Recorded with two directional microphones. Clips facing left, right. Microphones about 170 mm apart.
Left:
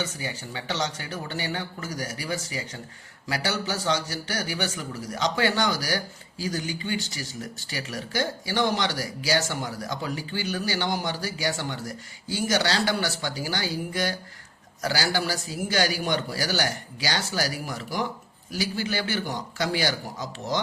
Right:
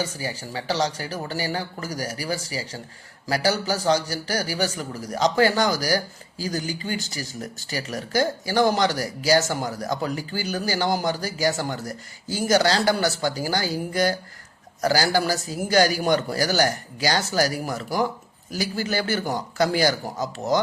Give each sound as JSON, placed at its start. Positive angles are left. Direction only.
{"t": 0.0, "sound": "a man's voice", "side_deg": -35}